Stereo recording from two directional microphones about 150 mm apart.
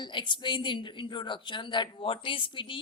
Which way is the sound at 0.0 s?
30° left (ahead or behind).